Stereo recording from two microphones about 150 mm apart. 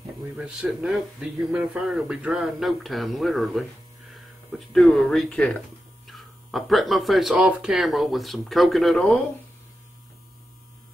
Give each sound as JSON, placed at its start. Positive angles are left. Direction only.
{"t": 0.4, "sound": "speech", "side_deg": -5}